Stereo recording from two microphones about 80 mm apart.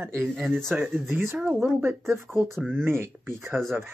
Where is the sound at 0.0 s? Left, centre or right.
Right.